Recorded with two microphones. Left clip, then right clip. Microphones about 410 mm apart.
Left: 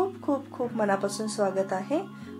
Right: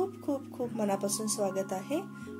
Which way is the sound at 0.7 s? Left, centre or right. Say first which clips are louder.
Left 6 dB; right.